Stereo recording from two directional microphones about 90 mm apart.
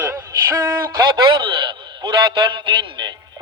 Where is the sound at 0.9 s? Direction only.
65° right (ahead or behind).